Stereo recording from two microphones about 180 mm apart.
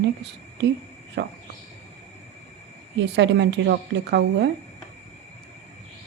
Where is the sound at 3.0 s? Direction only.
75° right (ahead or behind).